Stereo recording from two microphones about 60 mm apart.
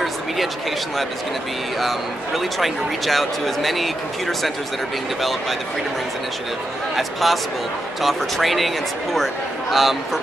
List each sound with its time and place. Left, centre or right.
1.8 s a man's voice: centre
7.0 s a man's voice: centre